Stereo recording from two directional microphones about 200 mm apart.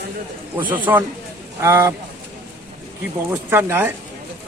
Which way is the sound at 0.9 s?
10° right (ahead or behind).